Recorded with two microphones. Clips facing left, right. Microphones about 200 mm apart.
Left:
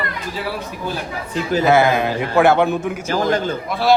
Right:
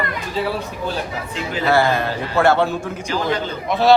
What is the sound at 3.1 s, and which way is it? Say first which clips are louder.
Speech: left 3 dB; 45° left (ahead or behind).